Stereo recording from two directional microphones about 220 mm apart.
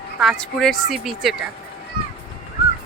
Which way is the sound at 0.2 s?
Centre (ahead or behind).